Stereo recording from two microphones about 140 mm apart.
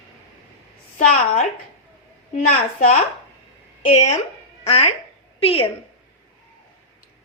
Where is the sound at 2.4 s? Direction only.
60° left (ahead or behind).